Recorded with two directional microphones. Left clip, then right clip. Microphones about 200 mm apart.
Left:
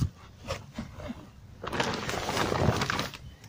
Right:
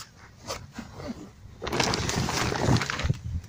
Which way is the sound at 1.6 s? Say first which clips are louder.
Right 4 dB; 35° right (ahead or behind).